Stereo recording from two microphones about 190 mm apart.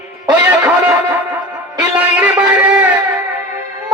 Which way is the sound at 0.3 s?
5° right (ahead or behind).